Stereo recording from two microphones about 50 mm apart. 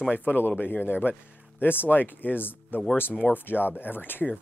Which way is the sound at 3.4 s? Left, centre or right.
Left.